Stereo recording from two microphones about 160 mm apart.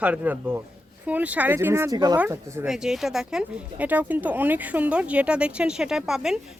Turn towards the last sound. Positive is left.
turn(degrees=-5)  # may be behind; listen again after turning